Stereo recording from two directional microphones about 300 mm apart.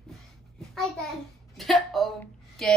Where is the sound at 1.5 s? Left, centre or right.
Centre.